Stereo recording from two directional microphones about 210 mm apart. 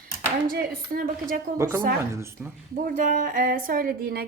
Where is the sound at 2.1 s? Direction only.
15° right (ahead or behind).